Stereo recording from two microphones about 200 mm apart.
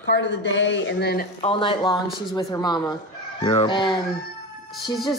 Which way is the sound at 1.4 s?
25° left (ahead or behind).